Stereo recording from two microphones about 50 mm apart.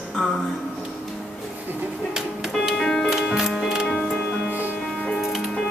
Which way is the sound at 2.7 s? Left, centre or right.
Centre.